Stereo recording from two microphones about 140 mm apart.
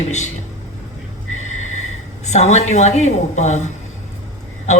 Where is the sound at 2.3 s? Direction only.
55° left (ahead or behind).